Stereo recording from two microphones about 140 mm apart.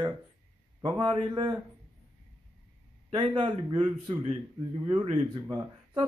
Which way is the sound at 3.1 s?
40° right (ahead or behind).